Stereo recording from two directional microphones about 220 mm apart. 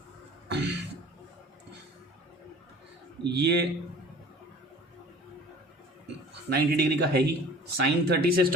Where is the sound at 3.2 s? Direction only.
50° right (ahead or behind).